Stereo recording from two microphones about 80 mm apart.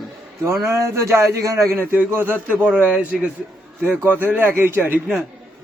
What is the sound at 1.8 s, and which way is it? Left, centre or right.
A man's voice, right.